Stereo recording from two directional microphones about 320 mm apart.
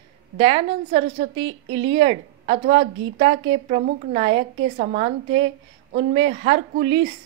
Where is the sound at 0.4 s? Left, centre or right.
Centre.